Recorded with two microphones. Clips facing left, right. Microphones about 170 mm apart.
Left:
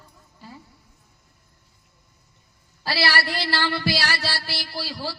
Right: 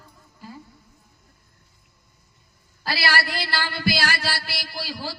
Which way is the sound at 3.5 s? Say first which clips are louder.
Left 2 dB; 30° left (ahead or behind).